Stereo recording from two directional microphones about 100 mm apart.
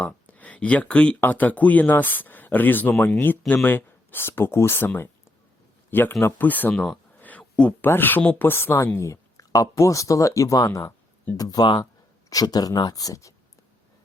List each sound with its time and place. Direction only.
0.0 s speech: 15° left (ahead or behind)
7.2 s a sound: 15° left (ahead or behind)
7.9 s speech: 20° left (ahead or behind)